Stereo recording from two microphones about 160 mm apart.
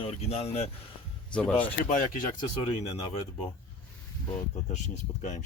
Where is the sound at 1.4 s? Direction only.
10° left (ahead or behind).